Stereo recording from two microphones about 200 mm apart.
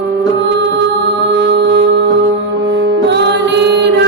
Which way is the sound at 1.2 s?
55° right (ahead or behind).